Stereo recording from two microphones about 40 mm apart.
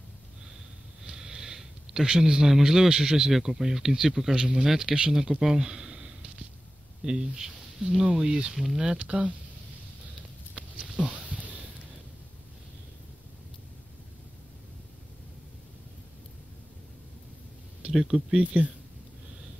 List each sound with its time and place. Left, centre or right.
1.0 s sniff: centre
2.6 s speech: centre
9.0 s speech: right
11.0 s a sound: right
17.9 s speech: centre